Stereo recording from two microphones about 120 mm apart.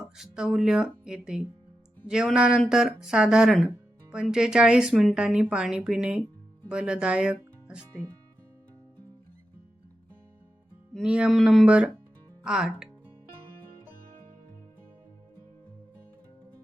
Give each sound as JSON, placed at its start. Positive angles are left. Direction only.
{"t": 0.2, "sound": "speech", "side_deg": 0}
{"t": 10.9, "sound": "speech", "side_deg": -5}
{"t": 11.6, "sound": "speech", "side_deg": -10}